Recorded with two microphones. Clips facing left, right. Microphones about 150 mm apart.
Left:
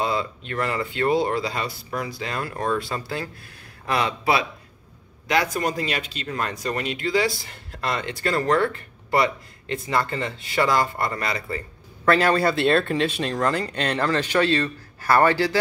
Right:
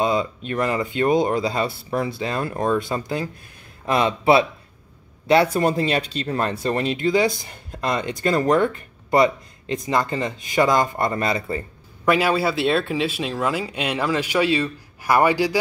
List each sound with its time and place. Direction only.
0.0 s speech: 20° right (ahead or behind)
12.0 s speech: 10° right (ahead or behind)